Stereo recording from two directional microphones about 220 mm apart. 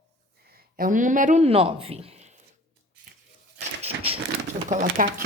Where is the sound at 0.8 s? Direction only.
35° right (ahead or behind).